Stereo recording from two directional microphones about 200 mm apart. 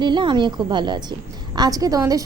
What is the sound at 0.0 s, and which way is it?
A woman's voice, 25° right (ahead or behind).